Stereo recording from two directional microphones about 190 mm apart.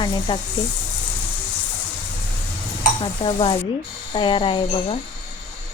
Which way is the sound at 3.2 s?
30° left (ahead or behind).